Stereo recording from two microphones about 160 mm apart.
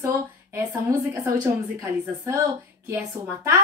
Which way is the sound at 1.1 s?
20° right (ahead or behind).